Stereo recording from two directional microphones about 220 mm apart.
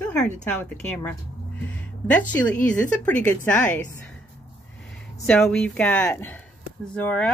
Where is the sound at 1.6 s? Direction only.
5° left (ahead or behind).